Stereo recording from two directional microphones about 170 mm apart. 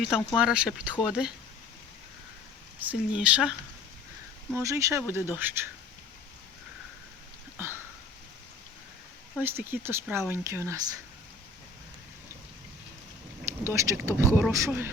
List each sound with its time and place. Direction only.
0.3 s speech: 5° right (ahead or behind)
2.8 s speech: 5° right (ahead or behind)
4.5 s speech: 15° right (ahead or behind)
7.6 s hiccup: 15° right (ahead or behind)
9.4 s speech: 10° right (ahead or behind)
13.4 s speech: 15° right (ahead or behind)